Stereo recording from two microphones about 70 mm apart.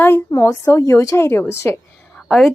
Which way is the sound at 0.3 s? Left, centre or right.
Left.